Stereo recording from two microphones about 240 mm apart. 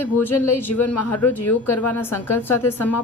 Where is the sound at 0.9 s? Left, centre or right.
Left.